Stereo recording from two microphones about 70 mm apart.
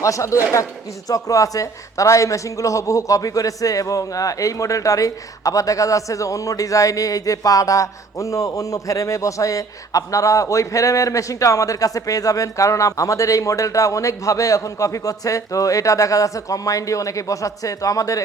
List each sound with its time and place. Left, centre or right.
0.0 s speech: left